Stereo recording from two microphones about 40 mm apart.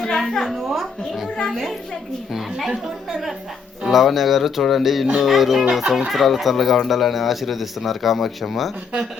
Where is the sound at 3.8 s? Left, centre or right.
Centre.